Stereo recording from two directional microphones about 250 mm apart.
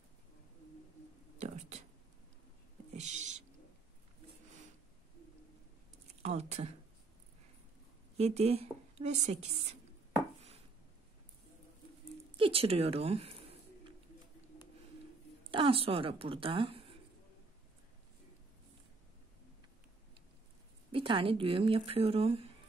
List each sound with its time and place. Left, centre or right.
2.9 s owl: right
6.2 s speech: right
8.2 s a woman's voice: right
12.4 s speech: right
15.4 s speech: right
20.9 s a woman's voice: right